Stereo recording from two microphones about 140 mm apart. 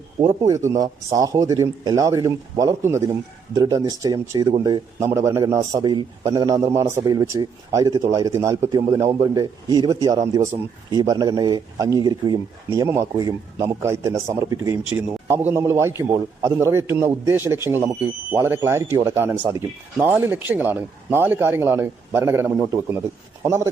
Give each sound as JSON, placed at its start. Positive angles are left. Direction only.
{"t": 0.2, "sound": "speech", "side_deg": -25}
{"t": 5.8, "sound": "a man's voice", "side_deg": -30}